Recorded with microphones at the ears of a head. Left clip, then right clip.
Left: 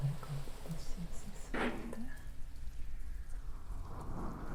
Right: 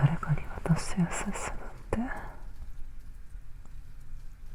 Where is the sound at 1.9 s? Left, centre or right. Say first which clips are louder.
Right 15 dB; right.